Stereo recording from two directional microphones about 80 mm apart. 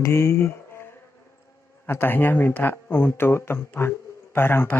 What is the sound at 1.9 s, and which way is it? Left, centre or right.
A man's voice, left.